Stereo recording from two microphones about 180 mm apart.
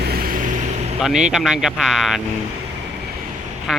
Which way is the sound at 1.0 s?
5° right (ahead or behind).